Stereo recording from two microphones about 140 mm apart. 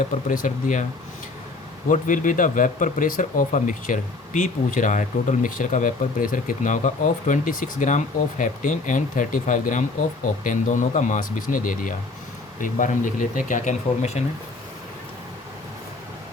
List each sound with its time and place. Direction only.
0.3 s speech: 70° left (ahead or behind)
1.9 s speech: 70° left (ahead or behind); by 14.3 s 50° left (ahead or behind)